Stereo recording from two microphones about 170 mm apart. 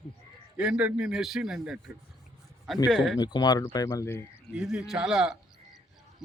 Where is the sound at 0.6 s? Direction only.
5° right (ahead or behind).